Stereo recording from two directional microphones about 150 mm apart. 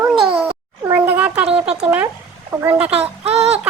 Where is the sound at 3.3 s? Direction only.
45° right (ahead or behind).